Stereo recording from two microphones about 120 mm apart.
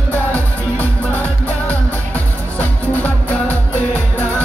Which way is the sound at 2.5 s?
15° left (ahead or behind).